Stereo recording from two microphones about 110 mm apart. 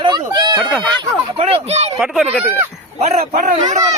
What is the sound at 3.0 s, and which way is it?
Speech, 75° right (ahead or behind).